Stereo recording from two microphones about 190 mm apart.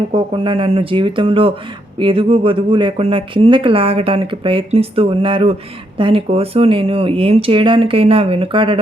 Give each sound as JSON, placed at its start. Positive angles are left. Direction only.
{"t": 0.1, "sound": "speech", "side_deg": -25}